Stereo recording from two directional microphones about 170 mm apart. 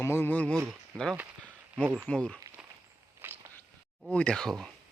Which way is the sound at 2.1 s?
5° left (ahead or behind).